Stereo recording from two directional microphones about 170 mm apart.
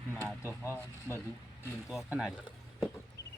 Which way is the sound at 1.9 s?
Centre (ahead or behind).